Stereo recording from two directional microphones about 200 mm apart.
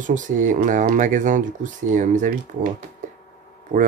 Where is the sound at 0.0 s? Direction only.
40° right (ahead or behind).